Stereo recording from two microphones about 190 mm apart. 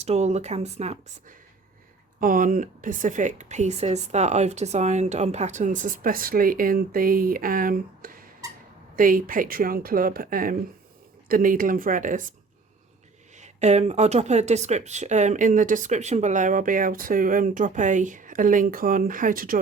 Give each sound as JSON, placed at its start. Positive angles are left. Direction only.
{"t": 0.0, "sound": "speech", "side_deg": -35}
{"t": 2.2, "sound": "a woman's voice", "side_deg": -45}
{"t": 13.3, "sound": "speech", "side_deg": -35}